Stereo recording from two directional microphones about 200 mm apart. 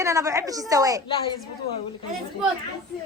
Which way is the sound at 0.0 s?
15° right (ahead or behind).